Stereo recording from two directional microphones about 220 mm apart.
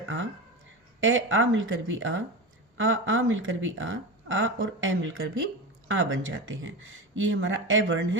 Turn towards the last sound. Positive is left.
turn(degrees=-60)  # may be behind; listen again after turning